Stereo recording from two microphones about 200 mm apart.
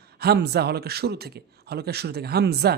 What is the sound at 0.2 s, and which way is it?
Speech, 55° right (ahead or behind).